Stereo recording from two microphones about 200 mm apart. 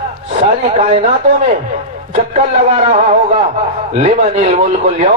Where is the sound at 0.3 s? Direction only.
30° right (ahead or behind).